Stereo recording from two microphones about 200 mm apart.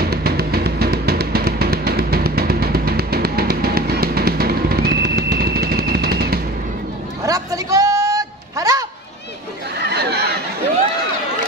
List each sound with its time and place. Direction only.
0.0 s music: 50° right (ahead or behind)
7.2 s a sound: 15° right (ahead or behind)
9.8 s chatter: 55° right (ahead or behind)